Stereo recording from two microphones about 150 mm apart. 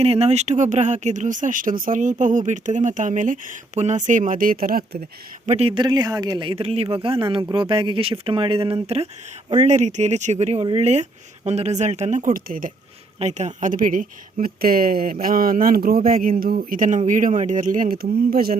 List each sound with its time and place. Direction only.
0.0 s speech: 45° right (ahead or behind); by 4.9 s 80° right
5.5 s speech: 45° right (ahead or behind)
5.8 s speech: 25° right (ahead or behind); by 12.7 s 70° right (ahead or behind)
13.1 s speech: 50° right (ahead or behind); by 18.5 s 85° right